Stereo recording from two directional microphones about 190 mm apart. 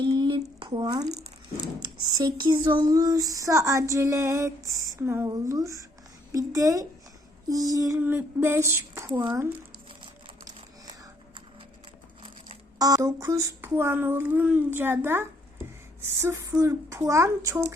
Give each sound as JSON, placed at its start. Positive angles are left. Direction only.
{"t": 0.0, "sound": "a sound", "side_deg": -25}
{"t": 2.0, "sound": "speech", "side_deg": -20}
{"t": 12.8, "sound": "speech", "side_deg": -15}